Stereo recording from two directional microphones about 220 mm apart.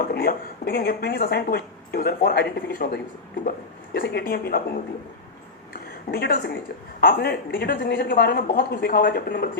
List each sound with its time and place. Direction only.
0.0 s speech: 45° left (ahead or behind)
6.1 s speech: 45° left (ahead or behind)